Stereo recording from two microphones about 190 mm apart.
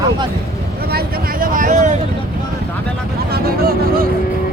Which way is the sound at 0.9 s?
50° right (ahead or behind).